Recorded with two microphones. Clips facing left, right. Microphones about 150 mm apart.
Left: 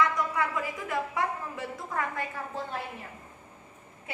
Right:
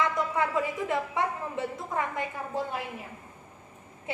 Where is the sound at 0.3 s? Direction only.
25° right (ahead or behind).